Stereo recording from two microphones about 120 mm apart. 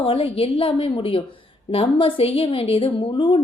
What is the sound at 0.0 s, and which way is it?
Speech, 50° left (ahead or behind).